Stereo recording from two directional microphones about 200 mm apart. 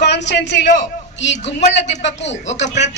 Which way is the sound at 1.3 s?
35° left (ahead or behind).